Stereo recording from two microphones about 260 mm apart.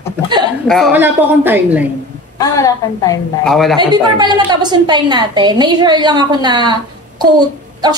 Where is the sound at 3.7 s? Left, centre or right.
Centre.